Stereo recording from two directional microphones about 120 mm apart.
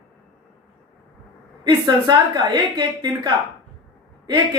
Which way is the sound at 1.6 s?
35° right (ahead or behind).